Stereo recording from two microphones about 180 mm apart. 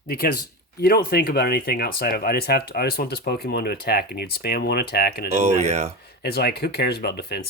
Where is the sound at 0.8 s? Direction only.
60° left (ahead or behind).